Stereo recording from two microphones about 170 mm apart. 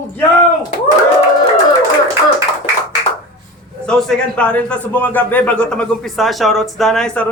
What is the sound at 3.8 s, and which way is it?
A man's voice, 5° left (ahead or behind).